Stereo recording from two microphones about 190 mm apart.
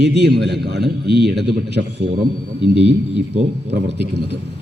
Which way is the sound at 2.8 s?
35° right (ahead or behind).